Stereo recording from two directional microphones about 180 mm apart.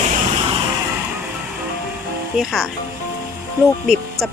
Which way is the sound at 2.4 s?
Centre (ahead or behind).